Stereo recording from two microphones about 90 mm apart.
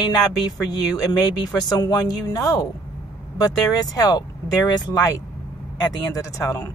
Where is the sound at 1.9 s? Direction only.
60° left (ahead or behind).